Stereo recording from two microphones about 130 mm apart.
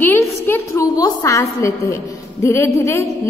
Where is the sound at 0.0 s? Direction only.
15° left (ahead or behind).